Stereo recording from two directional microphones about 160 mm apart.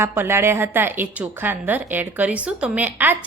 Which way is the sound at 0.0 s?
15° right (ahead or behind).